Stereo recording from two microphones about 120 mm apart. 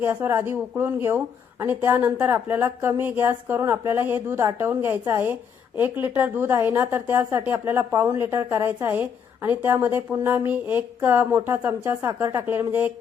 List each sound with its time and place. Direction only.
0.0 s a woman's voice: 15° right (ahead or behind)